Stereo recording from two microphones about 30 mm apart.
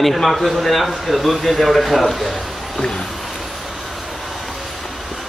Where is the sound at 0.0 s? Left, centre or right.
Centre.